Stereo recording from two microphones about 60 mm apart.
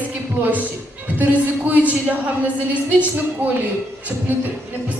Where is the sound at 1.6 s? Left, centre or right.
Right.